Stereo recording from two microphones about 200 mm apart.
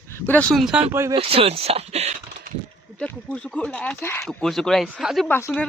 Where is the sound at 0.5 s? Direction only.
5° right (ahead or behind).